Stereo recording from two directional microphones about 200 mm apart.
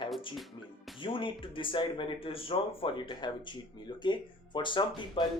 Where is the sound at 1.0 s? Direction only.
25° left (ahead or behind).